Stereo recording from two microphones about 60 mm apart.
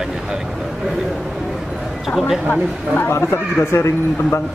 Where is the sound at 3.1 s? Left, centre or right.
Left.